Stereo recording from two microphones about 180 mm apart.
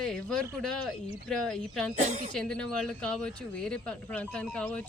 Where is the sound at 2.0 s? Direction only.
40° right (ahead or behind).